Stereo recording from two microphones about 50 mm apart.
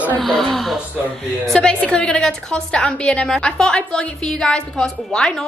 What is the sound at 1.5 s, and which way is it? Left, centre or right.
A woman's voice, centre.